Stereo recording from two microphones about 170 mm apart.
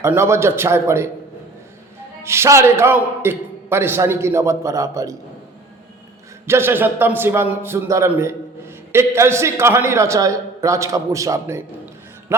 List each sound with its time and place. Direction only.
0.0 s a man's voice: 15° right (ahead or behind)
2.2 s a man's voice: 15° right (ahead or behind)
6.5 s a man's voice: 15° right (ahead or behind)